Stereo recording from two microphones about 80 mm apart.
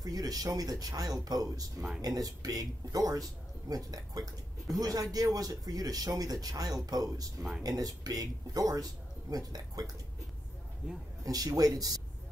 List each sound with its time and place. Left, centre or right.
0.0 s a man's voice: right
11.2 s a man's voice: right